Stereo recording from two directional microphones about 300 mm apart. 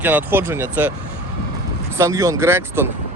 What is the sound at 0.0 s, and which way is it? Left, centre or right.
Speech, centre.